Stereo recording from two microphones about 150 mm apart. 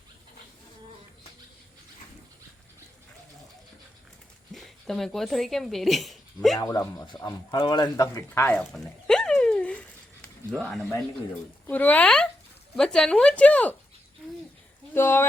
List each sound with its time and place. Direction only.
4.5 s a woman's voice: centre (ahead or behind)
6.6 s speech: 25° left (ahead or behind)
8.5 s a sound: 5° left (ahead or behind)
10.6 s a man's voice: centre (ahead or behind)
14.9 s speech: 15° left (ahead or behind)